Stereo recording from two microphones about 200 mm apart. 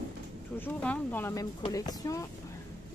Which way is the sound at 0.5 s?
10° left (ahead or behind).